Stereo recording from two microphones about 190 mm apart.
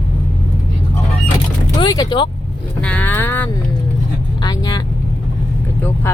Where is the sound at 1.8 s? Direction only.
20° left (ahead or behind).